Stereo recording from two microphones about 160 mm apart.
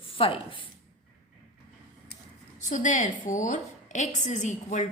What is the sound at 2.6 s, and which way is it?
A woman's voice, 55° left (ahead or behind).